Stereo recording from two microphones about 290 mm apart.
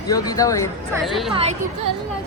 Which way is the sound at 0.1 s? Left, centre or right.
Centre.